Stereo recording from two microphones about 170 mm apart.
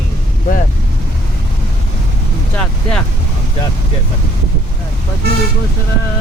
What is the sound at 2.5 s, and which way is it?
Speech, 5° left (ahead or behind).